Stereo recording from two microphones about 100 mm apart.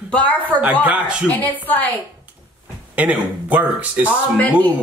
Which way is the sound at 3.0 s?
15° right (ahead or behind).